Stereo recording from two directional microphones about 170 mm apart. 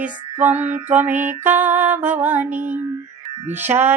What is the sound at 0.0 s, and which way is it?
Mantra, 10° right (ahead or behind).